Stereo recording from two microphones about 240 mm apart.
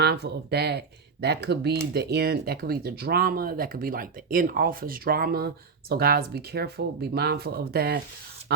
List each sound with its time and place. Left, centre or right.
0.0 s speech: right